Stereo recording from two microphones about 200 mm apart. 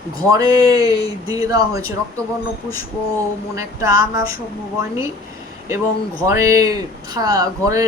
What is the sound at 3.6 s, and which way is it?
Speech, 15° right (ahead or behind).